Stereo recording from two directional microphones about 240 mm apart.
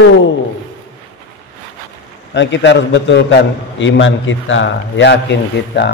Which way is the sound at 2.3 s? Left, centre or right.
Left.